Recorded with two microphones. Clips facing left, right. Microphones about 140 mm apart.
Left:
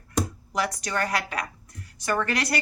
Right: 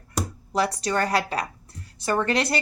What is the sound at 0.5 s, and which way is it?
Speech, 30° right (ahead or behind).